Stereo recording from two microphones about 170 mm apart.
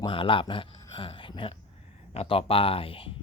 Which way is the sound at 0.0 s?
30° left (ahead or behind).